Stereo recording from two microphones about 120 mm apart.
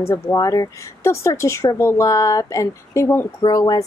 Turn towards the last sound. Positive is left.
turn(degrees=35)  # may be behind; listen again after turning